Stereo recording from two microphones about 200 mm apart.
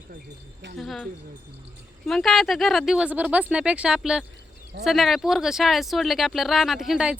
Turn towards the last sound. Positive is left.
turn(degrees=-5)  # may be behind; listen again after turning